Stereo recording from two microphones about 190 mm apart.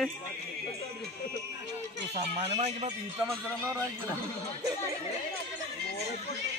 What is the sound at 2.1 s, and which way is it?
Speech, 30° right (ahead or behind).